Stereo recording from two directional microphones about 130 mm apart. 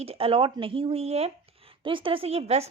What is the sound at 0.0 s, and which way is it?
Speech, 50° right (ahead or behind).